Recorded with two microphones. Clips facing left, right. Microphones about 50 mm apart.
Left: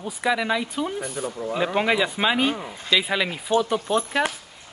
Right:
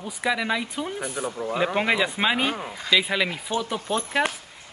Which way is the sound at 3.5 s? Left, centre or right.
Centre.